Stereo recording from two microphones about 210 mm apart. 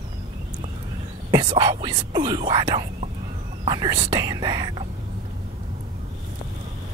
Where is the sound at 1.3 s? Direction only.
20° right (ahead or behind).